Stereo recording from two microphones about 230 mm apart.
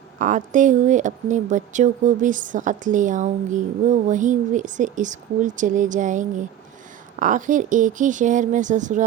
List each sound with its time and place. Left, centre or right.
0.2 s speech: right